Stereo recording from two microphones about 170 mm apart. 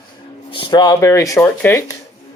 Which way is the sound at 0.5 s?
30° left (ahead or behind).